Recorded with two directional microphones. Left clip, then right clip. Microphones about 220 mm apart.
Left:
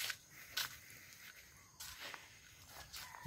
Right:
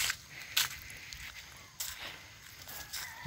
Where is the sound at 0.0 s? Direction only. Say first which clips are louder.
Right 9 dB; 40° right (ahead or behind).